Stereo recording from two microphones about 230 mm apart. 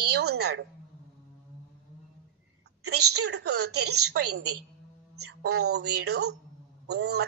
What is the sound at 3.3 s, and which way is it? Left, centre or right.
Speech, right.